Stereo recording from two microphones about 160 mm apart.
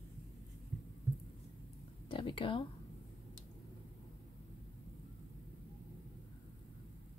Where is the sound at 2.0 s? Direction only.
30° left (ahead or behind).